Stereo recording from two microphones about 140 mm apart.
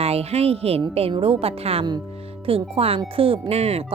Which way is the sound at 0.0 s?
45° right (ahead or behind).